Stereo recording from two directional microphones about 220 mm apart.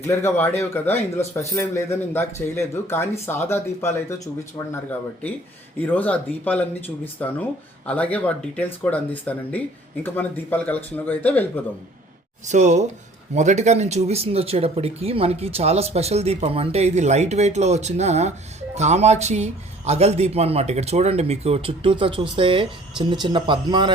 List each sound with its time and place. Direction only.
0.1 s a man's voice: 10° left (ahead or behind)
12.5 s speech: 35° right (ahead or behind)